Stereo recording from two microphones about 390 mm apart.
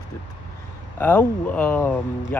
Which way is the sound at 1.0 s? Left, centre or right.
Centre.